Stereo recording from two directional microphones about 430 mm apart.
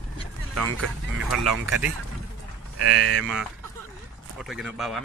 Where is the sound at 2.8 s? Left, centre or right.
Right.